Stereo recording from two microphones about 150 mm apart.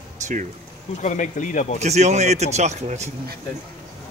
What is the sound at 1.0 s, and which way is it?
Speech, 55° left (ahead or behind).